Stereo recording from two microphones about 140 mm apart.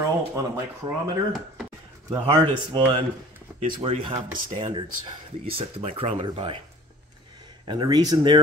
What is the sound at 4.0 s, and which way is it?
Speech, 35° right (ahead or behind).